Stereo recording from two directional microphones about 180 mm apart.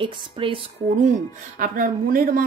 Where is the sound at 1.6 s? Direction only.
50° right (ahead or behind).